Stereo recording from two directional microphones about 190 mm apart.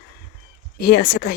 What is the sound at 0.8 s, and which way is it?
Speech, 55° left (ahead or behind).